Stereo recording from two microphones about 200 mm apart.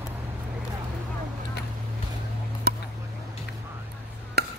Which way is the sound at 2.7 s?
50° right (ahead or behind).